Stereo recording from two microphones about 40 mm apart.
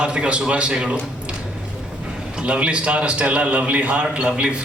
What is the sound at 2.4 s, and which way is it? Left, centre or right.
A man's voice, right.